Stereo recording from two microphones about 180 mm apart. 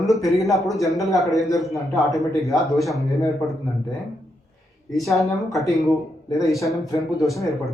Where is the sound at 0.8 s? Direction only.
20° left (ahead or behind).